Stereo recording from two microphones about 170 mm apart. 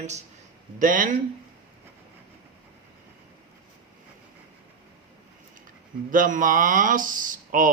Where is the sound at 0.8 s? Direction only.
50° right (ahead or behind).